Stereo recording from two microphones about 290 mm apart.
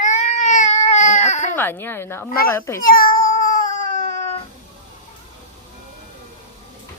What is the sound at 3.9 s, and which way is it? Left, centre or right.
Baby cry, left.